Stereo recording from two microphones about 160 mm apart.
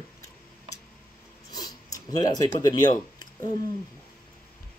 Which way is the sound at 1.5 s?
25° left (ahead or behind).